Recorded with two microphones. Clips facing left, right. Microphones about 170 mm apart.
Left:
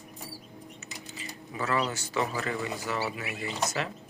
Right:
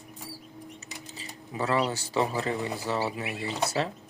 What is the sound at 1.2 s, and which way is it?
Speech, 30° right (ahead or behind).